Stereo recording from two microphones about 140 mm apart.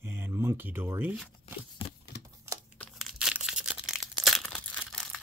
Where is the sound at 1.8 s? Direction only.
40° left (ahead or behind).